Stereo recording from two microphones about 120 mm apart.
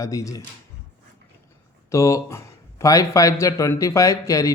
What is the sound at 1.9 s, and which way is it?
A man's voice, 25° left (ahead or behind).